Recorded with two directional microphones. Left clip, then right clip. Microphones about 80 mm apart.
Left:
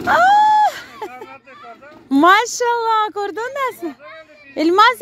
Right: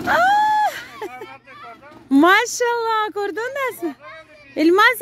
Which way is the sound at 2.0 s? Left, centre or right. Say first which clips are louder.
Left 2 dB; right.